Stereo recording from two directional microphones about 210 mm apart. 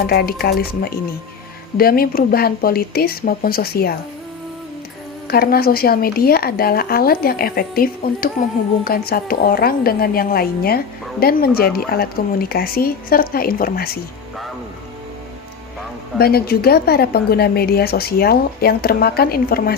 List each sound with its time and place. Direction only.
0.1 s speech: 45° left (ahead or behind)
5.3 s speech: 45° left (ahead or behind)
16.1 s speech: 50° left (ahead or behind)